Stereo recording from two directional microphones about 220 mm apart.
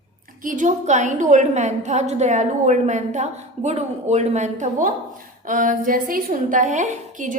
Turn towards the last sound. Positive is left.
turn(degrees=-35)  # may be behind; listen again after turning